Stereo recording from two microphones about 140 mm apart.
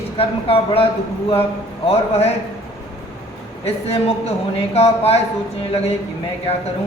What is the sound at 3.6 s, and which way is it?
Speech, 45° left (ahead or behind).